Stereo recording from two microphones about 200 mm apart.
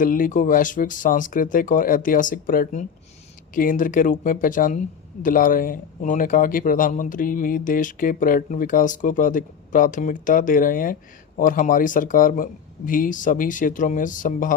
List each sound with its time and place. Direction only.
0.0 s speech: 45° left (ahead or behind)